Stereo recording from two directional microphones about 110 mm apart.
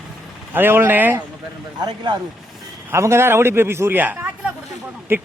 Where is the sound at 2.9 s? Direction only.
25° right (ahead or behind).